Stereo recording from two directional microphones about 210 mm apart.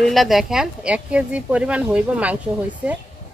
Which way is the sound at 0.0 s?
Centre (ahead or behind).